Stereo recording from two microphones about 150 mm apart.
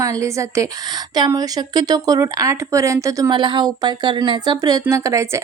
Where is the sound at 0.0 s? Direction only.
20° right (ahead or behind).